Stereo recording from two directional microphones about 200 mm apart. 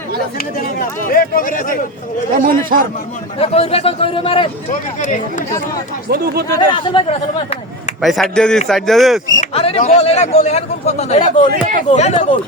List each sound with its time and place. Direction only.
0.3 s speech: 45° left (ahead or behind)
2.3 s a man's voice: 45° right (ahead or behind)
3.4 s a man's voice: 30° left (ahead or behind)
4.7 s a man's voice: 40° left (ahead or behind)
6.1 s a man's voice: 50° right (ahead or behind)
6.6 s a man's voice: 25° left (ahead or behind)
8.0 s a man's voice: centre (ahead or behind)
9.4 s a man's voice: 30° left (ahead or behind)